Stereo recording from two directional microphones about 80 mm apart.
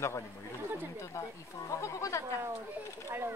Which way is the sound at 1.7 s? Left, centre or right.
Left.